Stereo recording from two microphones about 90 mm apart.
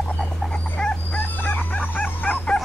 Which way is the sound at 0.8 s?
15° left (ahead or behind).